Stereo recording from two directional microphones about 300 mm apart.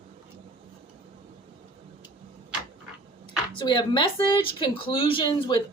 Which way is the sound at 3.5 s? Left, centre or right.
Centre.